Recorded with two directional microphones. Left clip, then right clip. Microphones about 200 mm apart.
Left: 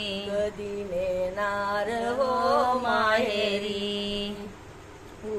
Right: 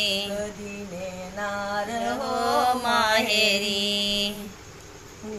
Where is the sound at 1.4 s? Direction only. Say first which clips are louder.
Left 1 dB; 25° left (ahead or behind).